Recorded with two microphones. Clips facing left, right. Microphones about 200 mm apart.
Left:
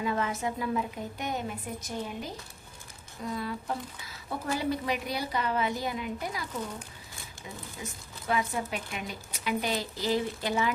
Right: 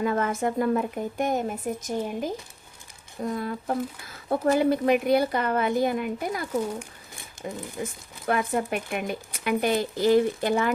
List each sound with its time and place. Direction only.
0.0 s speech: 50° right (ahead or behind)
7.4 s speech: 20° right (ahead or behind)
7.8 s speech: 55° right (ahead or behind)